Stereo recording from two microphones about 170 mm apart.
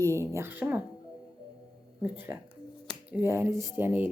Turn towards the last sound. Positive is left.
turn(degrees=-10)  # may be behind; listen again after turning